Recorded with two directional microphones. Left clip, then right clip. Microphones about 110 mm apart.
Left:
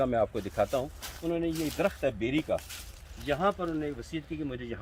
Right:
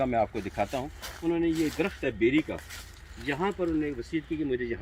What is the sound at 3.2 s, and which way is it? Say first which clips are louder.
Speech: left 1 dB; 30° left (ahead or behind).